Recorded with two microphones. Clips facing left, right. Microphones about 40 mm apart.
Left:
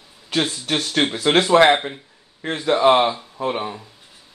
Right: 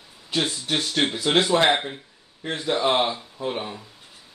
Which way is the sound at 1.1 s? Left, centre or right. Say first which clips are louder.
Left 5 dB; left.